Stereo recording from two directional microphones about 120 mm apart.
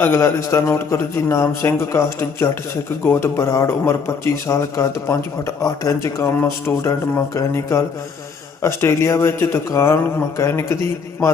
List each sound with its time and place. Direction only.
0.0 s a man's voice: 20° left (ahead or behind)